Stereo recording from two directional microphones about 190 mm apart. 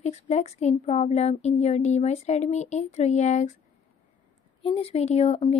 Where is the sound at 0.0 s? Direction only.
35° left (ahead or behind).